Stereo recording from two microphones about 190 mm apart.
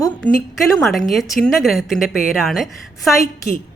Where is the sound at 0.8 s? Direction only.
Centre (ahead or behind).